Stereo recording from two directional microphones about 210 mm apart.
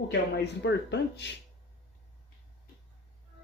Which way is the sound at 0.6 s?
55° left (ahead or behind).